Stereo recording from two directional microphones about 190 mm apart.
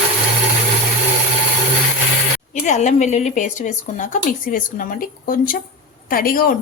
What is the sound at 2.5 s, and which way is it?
A woman's voice, 40° left (ahead or behind).